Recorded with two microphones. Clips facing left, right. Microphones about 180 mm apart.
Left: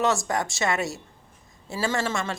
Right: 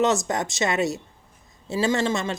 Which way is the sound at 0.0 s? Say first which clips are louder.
Right 2 dB; 20° right (ahead or behind).